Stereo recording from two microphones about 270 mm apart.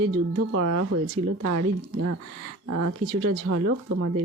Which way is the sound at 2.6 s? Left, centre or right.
Right.